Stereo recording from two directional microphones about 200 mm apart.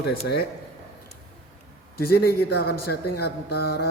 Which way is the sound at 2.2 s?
50° left (ahead or behind).